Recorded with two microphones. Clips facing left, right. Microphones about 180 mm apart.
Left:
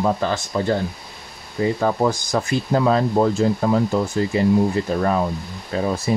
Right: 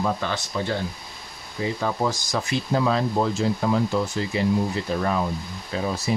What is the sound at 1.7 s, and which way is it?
Speech, 50° left (ahead or behind).